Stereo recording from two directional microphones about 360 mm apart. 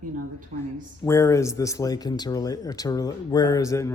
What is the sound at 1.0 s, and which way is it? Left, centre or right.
Speech, centre.